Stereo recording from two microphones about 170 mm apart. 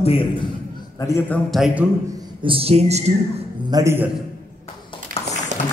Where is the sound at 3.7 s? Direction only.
15° right (ahead or behind).